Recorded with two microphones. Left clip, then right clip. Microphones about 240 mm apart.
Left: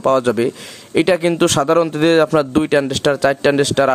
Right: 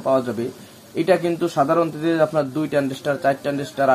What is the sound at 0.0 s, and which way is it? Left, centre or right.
Speech, left.